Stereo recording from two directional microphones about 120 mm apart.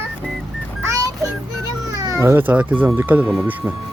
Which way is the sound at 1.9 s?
25° right (ahead or behind).